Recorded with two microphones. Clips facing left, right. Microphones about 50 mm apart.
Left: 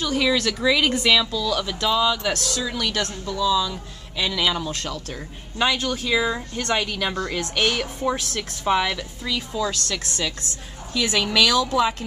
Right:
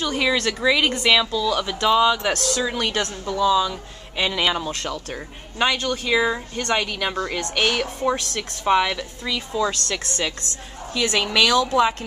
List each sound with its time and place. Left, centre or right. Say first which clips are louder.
0.0 s a woman's voice: even; centre
5.7 s speech: even; centre
6.0 s a woman's voice: right 2 dB; centre
9.6 s a woman's voice: right 4 dB; centre